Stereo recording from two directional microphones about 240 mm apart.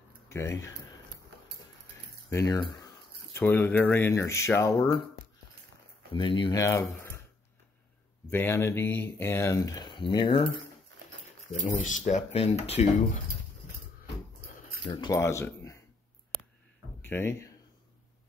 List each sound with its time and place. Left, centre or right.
0.3 s speech: centre
2.2 s speech: centre
6.1 s speech: left
8.3 s speech: centre
11.8 s speech: left
14.9 s speech: centre
17.0 s speech: centre